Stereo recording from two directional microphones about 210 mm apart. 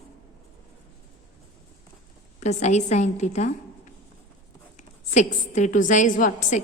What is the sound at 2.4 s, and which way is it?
A woman's voice, 35° left (ahead or behind).